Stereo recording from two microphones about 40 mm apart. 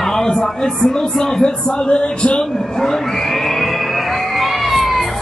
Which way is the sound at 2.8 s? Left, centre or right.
Centre.